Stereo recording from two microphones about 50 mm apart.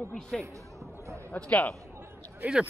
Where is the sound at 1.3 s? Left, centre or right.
Left.